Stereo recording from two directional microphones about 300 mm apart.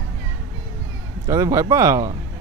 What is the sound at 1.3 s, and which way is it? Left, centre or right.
Speech, centre.